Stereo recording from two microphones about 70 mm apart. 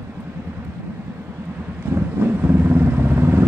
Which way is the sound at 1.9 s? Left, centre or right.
Right.